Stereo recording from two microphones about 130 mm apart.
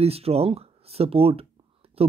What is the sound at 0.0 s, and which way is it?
Speech, 50° right (ahead or behind).